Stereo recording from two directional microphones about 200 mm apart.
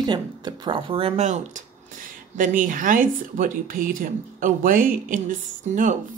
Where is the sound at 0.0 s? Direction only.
25° right (ahead or behind).